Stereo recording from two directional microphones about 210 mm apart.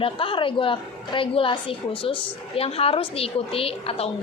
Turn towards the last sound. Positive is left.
turn(degrees=25)  # may be behind; listen again after turning